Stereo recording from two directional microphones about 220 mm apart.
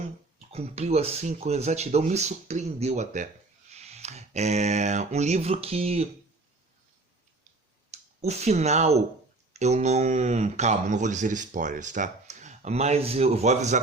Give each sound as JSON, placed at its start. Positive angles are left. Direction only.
{"t": 0.5, "sound": "speech", "side_deg": -30}
{"t": 7.9, "sound": "speech", "side_deg": -30}